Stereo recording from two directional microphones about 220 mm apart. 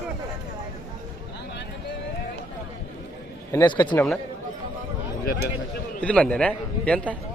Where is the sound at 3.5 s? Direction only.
20° left (ahead or behind).